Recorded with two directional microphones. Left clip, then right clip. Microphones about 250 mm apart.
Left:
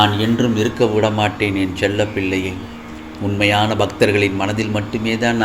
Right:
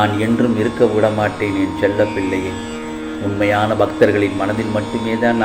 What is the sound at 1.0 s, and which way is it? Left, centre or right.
A man's voice, left.